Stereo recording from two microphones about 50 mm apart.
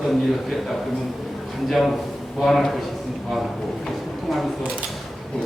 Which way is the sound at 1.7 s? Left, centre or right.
Centre.